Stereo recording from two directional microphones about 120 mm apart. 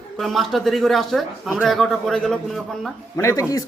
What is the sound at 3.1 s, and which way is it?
Speech, 25° left (ahead or behind).